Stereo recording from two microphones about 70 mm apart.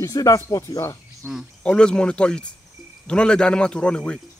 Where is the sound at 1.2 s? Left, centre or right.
Right.